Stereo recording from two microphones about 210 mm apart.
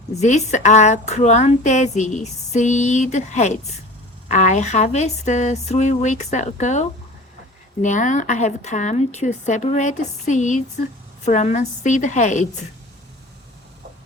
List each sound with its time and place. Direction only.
0.1 s speech: 35° left (ahead or behind)